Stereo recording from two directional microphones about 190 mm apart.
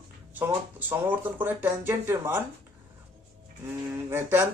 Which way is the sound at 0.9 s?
10° right (ahead or behind).